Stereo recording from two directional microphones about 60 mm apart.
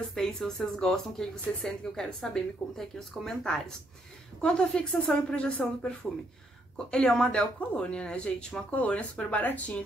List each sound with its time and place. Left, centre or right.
0.1 s speech: centre
5.0 s speech: left